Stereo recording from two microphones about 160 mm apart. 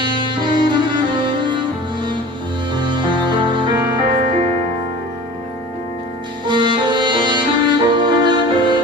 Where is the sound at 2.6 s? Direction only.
30° right (ahead or behind).